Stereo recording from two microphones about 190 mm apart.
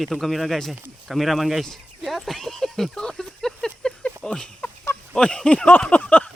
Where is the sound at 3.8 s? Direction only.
5° left (ahead or behind).